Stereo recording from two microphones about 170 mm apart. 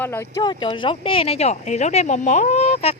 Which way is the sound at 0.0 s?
15° left (ahead or behind).